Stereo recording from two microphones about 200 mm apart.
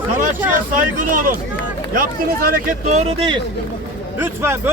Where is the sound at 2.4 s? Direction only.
45° right (ahead or behind).